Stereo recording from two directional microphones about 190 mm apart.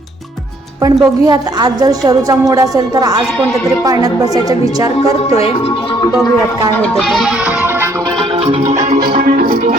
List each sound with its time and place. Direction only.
0.8 s a woman's voice: 20° right (ahead or behind)
6.9 s music: centre (ahead or behind)
8.6 s music: 35° right (ahead or behind)
9.1 s music: 50° right (ahead or behind)